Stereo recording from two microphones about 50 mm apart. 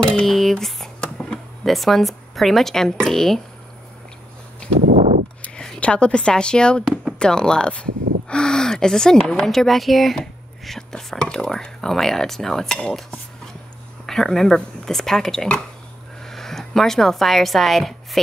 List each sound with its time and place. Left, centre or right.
0.0 s speech: centre
1.0 s a sound: centre
1.6 s speech: centre
5.8 s speech: left; by 10.1 s centre
10.6 s whispering: centre
11.2 s speech: centre
14.0 s speech: centre